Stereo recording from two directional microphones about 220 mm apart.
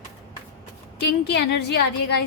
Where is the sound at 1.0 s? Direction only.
50° left (ahead or behind).